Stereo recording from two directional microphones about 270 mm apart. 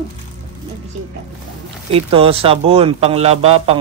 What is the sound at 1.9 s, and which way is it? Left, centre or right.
Speech, right.